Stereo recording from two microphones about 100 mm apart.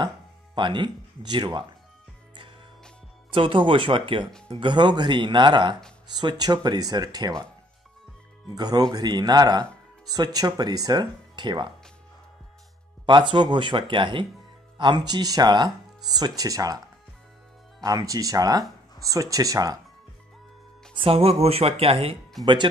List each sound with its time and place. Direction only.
0.6 s speech: 50° right (ahead or behind)
3.3 s speech: 60° right (ahead or behind); by 7.4 s 40° right (ahead or behind)
8.5 s speech: 40° right (ahead or behind)
13.0 s speech: 55° right (ahead or behind); by 16.8 s 40° right (ahead or behind)
17.8 s speech: 35° right (ahead or behind)
20.9 s speech: 65° right (ahead or behind)
22.4 s speech: 50° right (ahead or behind)